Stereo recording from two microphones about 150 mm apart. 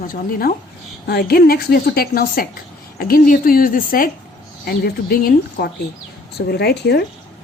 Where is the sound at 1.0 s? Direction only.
90° left; by 4.1 s 70° left (ahead or behind).